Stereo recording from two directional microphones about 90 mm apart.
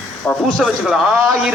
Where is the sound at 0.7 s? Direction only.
10° right (ahead or behind).